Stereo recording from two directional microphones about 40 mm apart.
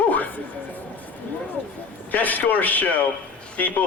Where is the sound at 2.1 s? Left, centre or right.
Left.